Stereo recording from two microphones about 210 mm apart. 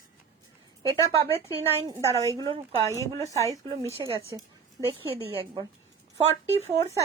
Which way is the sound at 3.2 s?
15° left (ahead or behind).